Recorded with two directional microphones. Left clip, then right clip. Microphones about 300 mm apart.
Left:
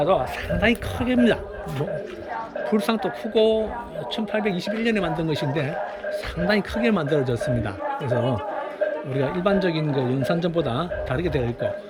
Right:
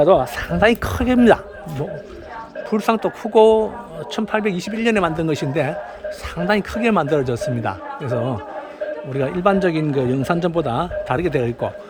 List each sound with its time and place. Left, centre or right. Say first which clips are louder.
0.0 s speech: right 7 dB; right
2.6 s speech: right 5 dB; centre
9.1 s speech: right 6 dB; centre